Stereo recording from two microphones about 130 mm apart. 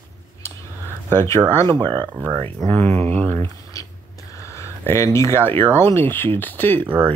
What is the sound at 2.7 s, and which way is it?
Speech, 45° right (ahead or behind).